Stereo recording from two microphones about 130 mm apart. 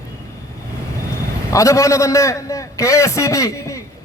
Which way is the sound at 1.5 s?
25° left (ahead or behind).